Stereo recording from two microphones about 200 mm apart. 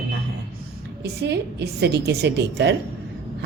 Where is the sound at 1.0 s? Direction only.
55° right (ahead or behind).